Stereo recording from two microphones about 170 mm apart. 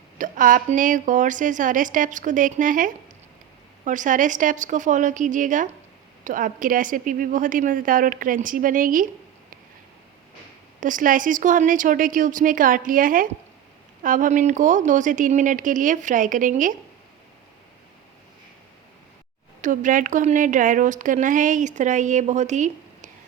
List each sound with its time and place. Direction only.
0.2 s a woman's voice: 50° right (ahead or behind)
10.8 s a woman's voice: 50° right (ahead or behind)
19.6 s a woman's voice: 50° right (ahead or behind)